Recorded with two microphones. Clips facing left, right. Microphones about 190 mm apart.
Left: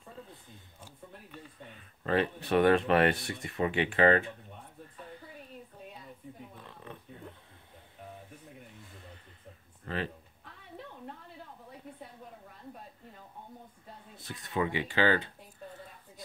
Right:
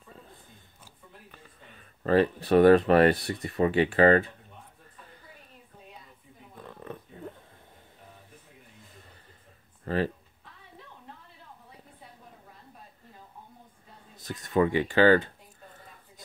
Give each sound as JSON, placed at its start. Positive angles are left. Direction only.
{"t": 2.0, "sound": "speech", "side_deg": -40}
{"t": 6.8, "sound": "a sound", "side_deg": -45}
{"t": 9.8, "sound": "speech", "side_deg": -40}
{"t": 14.1, "sound": "speech", "side_deg": -45}